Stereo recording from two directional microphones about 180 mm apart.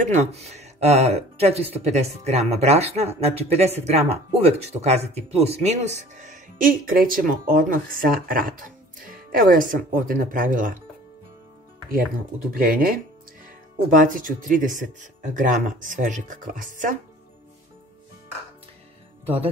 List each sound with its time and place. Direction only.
0.0 s speech: 40° right (ahead or behind)
11.9 s speech: 55° right (ahead or behind)
19.2 s speech: 35° right (ahead or behind)